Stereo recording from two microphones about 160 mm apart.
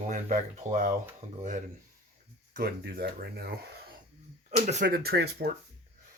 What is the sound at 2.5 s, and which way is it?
Speech, 70° right (ahead or behind).